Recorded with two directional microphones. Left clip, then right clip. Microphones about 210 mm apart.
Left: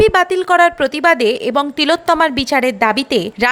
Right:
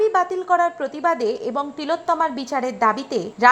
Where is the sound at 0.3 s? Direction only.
35° left (ahead or behind).